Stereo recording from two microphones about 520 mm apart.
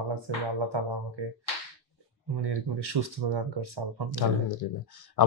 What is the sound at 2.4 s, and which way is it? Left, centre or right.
Speech, right.